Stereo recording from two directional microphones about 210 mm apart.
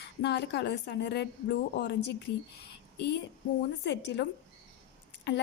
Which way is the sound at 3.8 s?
55° left (ahead or behind).